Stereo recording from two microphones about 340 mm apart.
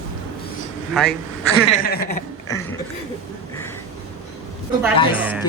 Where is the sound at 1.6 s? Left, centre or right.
Left.